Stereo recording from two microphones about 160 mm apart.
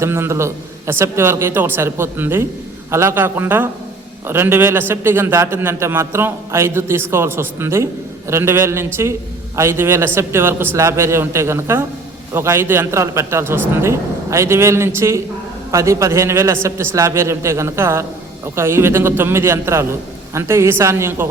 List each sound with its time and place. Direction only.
0.0 s a man's voice: 15° right (ahead or behind)